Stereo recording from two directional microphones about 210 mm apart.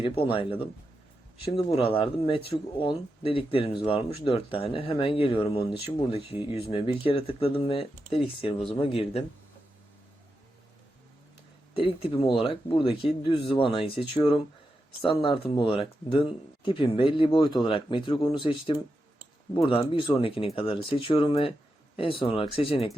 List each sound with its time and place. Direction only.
0.0 s speech: 25° left (ahead or behind)
11.8 s speech: 25° left (ahead or behind)